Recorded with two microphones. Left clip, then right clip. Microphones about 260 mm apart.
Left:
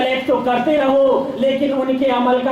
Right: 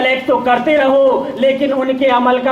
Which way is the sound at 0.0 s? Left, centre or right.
Right.